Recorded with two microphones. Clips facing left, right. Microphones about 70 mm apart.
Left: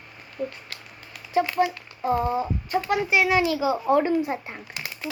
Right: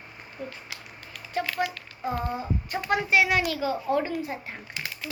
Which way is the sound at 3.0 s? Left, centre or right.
Centre.